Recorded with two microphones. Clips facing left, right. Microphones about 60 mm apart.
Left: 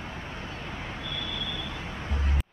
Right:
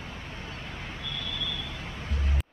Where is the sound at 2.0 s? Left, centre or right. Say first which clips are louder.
Left 2 dB; left.